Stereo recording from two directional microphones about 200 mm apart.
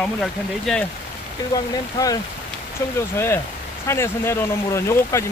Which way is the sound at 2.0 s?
20° left (ahead or behind).